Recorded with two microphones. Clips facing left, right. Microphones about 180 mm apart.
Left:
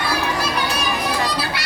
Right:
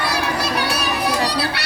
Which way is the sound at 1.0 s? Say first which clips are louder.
Right 2 dB; 65° right (ahead or behind).